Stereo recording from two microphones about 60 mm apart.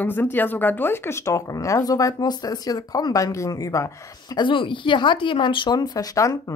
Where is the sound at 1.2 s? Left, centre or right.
Left.